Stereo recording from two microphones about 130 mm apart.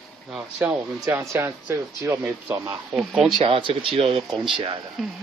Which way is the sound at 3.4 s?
40° right (ahead or behind).